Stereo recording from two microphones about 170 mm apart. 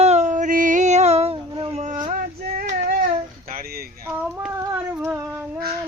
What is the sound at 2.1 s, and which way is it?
Child singing, 55° right (ahead or behind).